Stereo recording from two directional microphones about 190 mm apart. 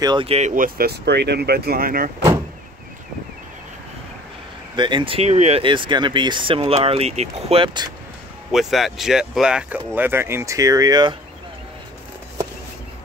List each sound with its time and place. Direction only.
0.0 s speech: 25° right (ahead or behind)
0.6 s speech: 55° right (ahead or behind)
4.7 s speech: 25° right (ahead or behind)
8.5 s speech: centre (ahead or behind); by 11.1 s 20° right (ahead or behind)